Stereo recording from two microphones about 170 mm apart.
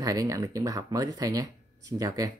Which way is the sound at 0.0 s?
20° right (ahead or behind).